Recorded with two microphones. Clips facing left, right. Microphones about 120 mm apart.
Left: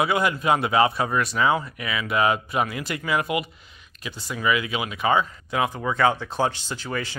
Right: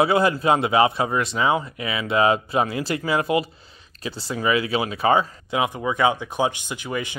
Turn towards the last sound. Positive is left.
turn(degrees=-15)  # may be behind; listen again after turning